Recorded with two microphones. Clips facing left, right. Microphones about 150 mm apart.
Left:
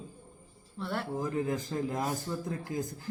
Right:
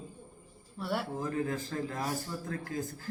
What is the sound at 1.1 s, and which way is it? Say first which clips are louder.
A man's voice: left 2 dB; 20° left (ahead or behind).